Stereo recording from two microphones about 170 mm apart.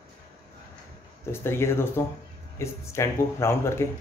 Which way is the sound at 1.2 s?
15° left (ahead or behind).